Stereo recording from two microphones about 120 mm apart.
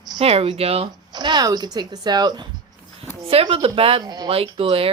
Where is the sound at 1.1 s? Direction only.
35° right (ahead or behind).